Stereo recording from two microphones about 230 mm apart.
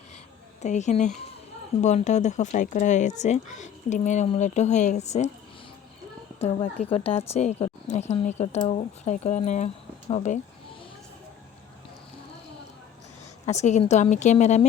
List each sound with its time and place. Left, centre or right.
0.6 s speech: left
6.4 s a woman's voice: left
13.4 s speech: left